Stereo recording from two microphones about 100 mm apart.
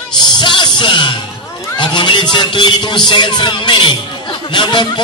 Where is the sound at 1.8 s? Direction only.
50° left (ahead or behind).